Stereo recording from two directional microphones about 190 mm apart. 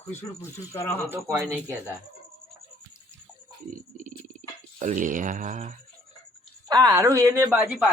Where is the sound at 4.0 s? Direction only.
45° right (ahead or behind).